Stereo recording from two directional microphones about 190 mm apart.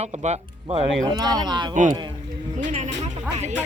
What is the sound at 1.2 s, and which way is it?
Speech, 20° right (ahead or behind).